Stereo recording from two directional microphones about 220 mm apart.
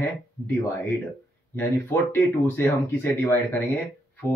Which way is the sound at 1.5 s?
10° left (ahead or behind).